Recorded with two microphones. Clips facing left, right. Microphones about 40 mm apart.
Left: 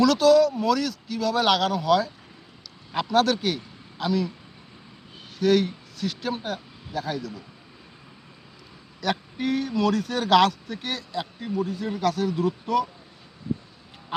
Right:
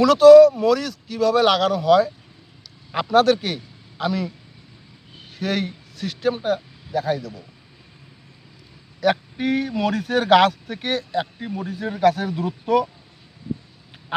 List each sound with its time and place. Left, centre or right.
0.0 s a man's voice: centre
5.3 s speech: centre
9.0 s speech: right